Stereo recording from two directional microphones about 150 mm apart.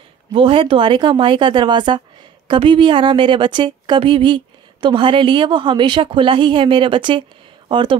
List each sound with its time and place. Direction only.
0.3 s speech: 35° right (ahead or behind)